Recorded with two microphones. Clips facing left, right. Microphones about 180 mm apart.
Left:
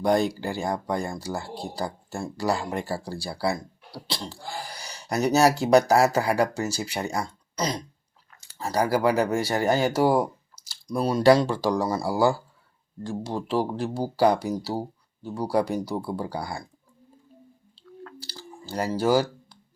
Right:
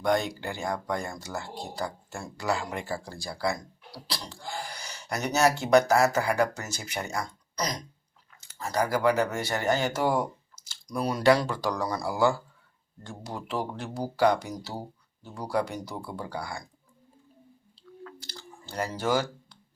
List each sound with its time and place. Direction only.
0.0 s speech: 35° left (ahead or behind)
18.6 s speech: 30° left (ahead or behind)